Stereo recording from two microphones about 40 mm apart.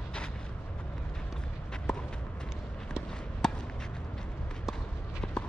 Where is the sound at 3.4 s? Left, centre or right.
Centre.